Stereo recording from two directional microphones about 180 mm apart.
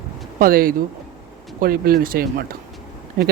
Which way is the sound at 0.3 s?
55° right (ahead or behind).